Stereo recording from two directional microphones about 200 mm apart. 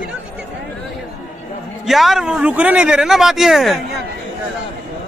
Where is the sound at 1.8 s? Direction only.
Centre (ahead or behind).